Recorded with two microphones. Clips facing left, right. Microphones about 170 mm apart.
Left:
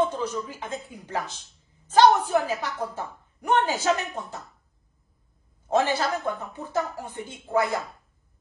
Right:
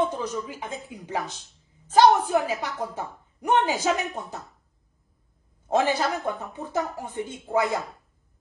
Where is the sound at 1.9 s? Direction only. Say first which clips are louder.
Even; 15° right (ahead or behind).